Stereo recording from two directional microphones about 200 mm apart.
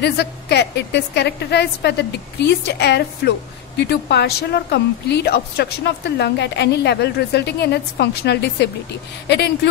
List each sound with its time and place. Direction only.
0.0 s a woman's voice: 55° left (ahead or behind)